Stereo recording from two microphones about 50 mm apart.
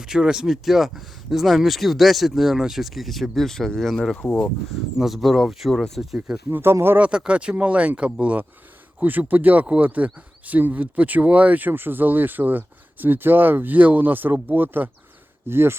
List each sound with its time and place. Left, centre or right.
0.0 s speech: centre
4.7 s speech: centre
6.5 s speech: right
7.0 s speech: right
15.4 s speech: right